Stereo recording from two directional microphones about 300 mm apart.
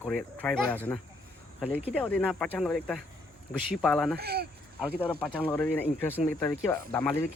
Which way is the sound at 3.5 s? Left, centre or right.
Left.